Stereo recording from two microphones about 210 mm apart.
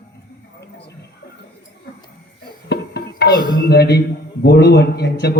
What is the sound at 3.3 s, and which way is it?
Music, 20° right (ahead or behind).